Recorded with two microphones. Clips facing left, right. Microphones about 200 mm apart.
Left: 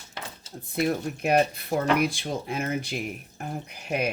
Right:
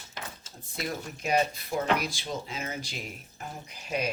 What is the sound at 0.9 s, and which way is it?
Speech, 60° left (ahead or behind).